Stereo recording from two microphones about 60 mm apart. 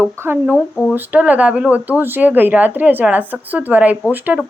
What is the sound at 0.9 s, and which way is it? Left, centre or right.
Speech, right.